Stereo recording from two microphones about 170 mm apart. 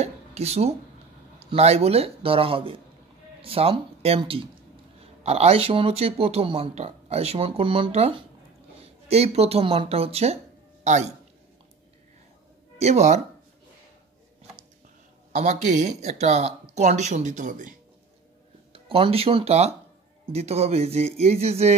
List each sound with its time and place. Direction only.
0.0 s dishes: 40° right (ahead or behind)
1.4 s speech: 40° right (ahead or behind)
12.7 s speech: 40° right (ahead or behind)
15.3 s speech: 45° right (ahead or behind)
18.7 s speech: 30° right (ahead or behind)